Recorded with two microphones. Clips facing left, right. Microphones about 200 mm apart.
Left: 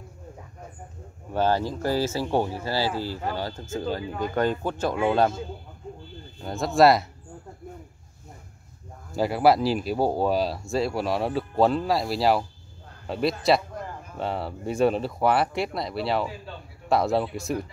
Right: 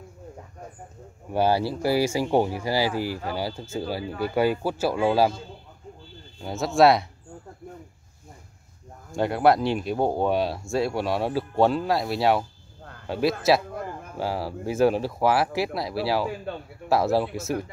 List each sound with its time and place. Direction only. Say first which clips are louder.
1.3 s speech: right 1 dB; 10° right (ahead or behind)
6.4 s speech: even; centre (ahead or behind)
9.1 s speech: even; 5° left (ahead or behind)
16.5 s a man's voice: right 7 dB; 60° right (ahead or behind)
16.9 s speech: right 1 dB; centre (ahead or behind)